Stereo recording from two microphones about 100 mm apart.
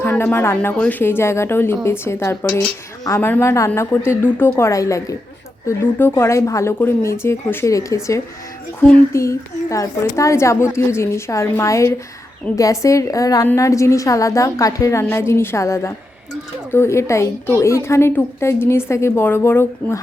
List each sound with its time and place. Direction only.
0.0 s a woman's voice: 20° left (ahead or behind)